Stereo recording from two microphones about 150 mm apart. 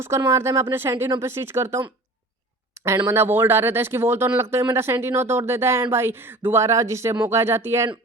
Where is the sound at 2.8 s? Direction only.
20° right (ahead or behind).